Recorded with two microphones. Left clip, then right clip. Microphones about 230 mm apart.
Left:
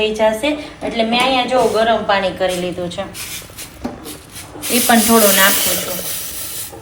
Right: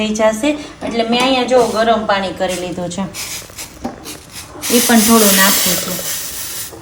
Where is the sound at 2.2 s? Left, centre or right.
Right.